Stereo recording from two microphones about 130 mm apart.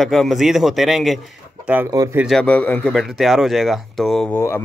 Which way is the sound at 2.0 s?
25° right (ahead or behind).